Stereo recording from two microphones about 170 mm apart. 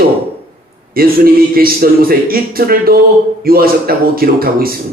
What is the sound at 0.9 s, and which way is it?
A man's voice, 60° right (ahead or behind).